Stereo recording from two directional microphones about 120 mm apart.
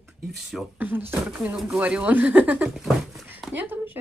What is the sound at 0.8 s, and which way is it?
Speech, 15° right (ahead or behind).